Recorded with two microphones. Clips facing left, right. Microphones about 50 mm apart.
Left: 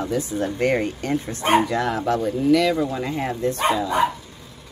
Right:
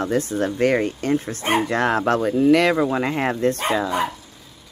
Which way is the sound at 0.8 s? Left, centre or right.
Right.